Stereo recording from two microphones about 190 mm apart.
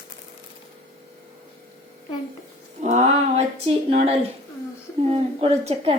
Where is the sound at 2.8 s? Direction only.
40° right (ahead or behind).